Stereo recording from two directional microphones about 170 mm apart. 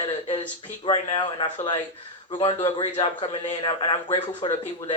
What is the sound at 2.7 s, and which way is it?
A man's voice, 30° left (ahead or behind).